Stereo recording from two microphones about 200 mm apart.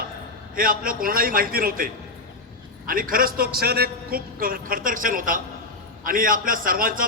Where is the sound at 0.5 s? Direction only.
45° right (ahead or behind).